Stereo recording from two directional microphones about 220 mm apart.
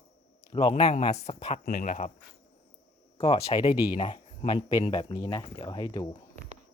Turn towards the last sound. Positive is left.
turn(degrees=20)  # may be behind; listen again after turning